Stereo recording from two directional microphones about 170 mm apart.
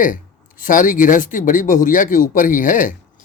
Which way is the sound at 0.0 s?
55° left (ahead or behind).